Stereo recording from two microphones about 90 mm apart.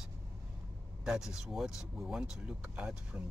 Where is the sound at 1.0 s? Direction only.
5° right (ahead or behind).